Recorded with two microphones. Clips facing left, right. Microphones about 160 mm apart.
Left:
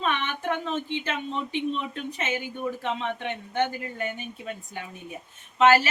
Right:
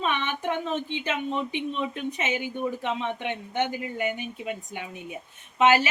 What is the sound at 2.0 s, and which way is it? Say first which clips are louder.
Speech: right 2 dB; 15° right (ahead or behind).